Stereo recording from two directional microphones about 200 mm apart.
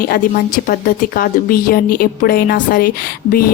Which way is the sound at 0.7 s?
45° left (ahead or behind).